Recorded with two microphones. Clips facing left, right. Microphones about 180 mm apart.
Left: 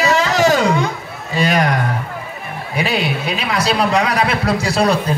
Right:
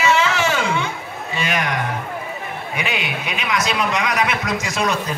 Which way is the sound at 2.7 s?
35° left (ahead or behind).